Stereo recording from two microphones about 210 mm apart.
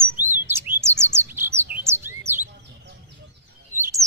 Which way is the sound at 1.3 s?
10° right (ahead or behind).